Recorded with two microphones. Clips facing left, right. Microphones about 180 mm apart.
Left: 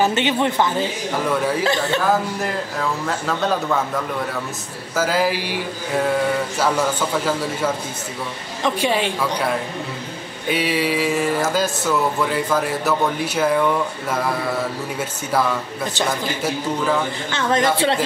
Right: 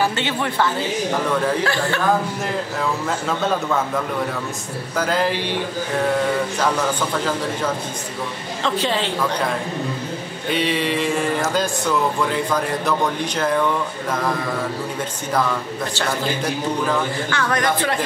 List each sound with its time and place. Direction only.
0.0 s a woman's voice: 20° left (ahead or behind)
4.9 s speech: 5° left (ahead or behind)
6.6 s speech: 10° left (ahead or behind)
10.5 s speech: 5° left (ahead or behind)
15.9 s a woman's voice: 15° left (ahead or behind)